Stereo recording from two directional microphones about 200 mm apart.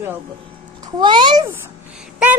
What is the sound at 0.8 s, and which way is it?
Speech, 20° right (ahead or behind).